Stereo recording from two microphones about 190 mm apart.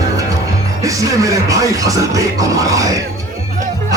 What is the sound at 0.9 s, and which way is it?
A man's voice, 15° right (ahead or behind).